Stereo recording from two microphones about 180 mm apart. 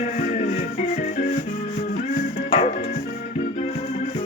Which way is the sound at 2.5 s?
35° left (ahead or behind).